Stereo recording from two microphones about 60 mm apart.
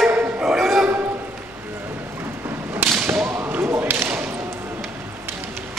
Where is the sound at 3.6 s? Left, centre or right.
Right.